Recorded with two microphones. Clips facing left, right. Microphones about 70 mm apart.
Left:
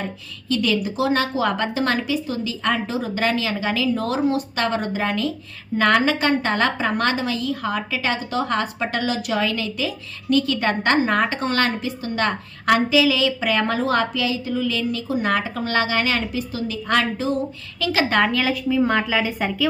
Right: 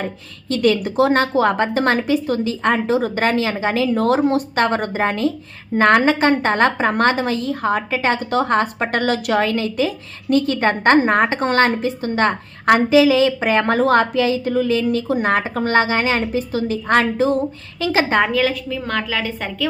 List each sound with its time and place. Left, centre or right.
0.0 s a woman's voice: right
17.8 s a woman's voice: right
18.3 s a woman's voice: centre
18.7 s a woman's voice: centre